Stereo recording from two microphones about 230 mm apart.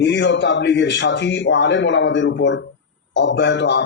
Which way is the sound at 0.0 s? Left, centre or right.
Left.